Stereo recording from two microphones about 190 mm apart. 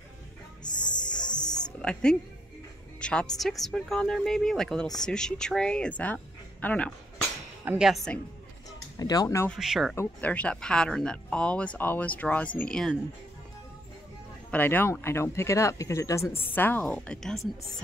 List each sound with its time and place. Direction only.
0.7 s music: 20° left (ahead or behind)
1.8 s a woman's voice: 5° left (ahead or behind)
7.6 s speech: 5° right (ahead or behind)
8.9 s speech: 20° left (ahead or behind)
9.5 s speech: centre (ahead or behind)
14.5 s speech: 10° left (ahead or behind)